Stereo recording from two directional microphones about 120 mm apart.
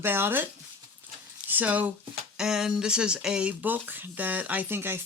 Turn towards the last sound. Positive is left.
turn(degrees=-20)  # may be behind; listen again after turning